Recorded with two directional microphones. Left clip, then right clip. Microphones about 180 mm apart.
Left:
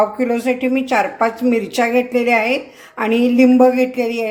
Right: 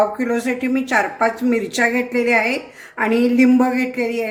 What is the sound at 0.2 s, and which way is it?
A woman's voice, 20° left (ahead or behind).